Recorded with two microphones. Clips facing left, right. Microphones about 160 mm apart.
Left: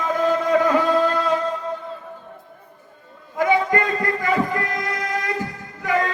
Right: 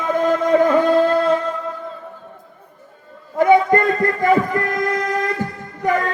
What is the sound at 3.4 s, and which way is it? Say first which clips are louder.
Music: right 6 dB; 40° right (ahead or behind).